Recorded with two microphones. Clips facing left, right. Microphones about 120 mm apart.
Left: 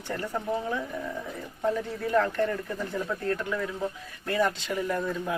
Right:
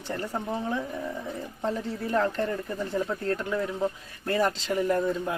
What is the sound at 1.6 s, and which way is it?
Speech, 30° right (ahead or behind).